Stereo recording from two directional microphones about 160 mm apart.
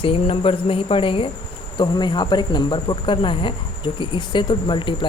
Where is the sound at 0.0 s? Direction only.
35° left (ahead or behind).